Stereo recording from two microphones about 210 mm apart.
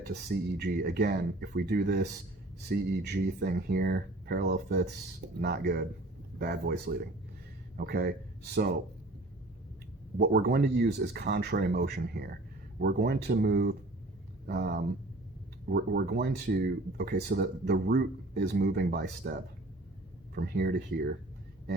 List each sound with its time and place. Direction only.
0.0 s speech: 50° right (ahead or behind)
10.2 s speech: 50° right (ahead or behind)